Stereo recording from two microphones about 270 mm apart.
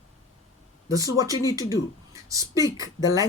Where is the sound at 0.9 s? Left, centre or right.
Centre.